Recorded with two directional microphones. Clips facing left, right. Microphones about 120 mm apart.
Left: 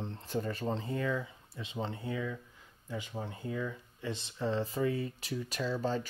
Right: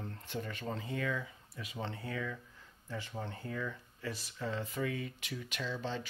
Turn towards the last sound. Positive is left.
turn(degrees=40)  # may be behind; listen again after turning